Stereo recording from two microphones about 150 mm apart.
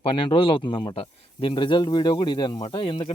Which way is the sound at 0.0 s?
35° left (ahead or behind).